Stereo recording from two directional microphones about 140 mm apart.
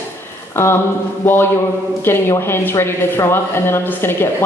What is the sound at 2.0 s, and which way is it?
Speech, 15° left (ahead or behind).